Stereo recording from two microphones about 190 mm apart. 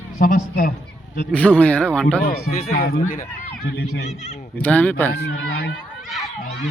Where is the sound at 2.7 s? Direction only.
55° left (ahead or behind).